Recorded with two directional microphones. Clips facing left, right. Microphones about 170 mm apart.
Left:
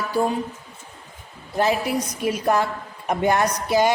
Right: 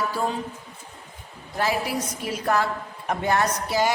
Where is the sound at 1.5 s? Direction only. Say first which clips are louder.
Left 4 dB; 20° left (ahead or behind).